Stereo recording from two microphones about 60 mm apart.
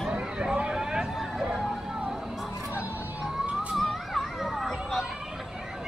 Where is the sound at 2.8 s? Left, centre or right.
Centre.